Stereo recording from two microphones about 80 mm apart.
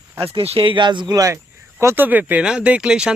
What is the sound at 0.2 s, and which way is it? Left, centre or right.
Speech, right.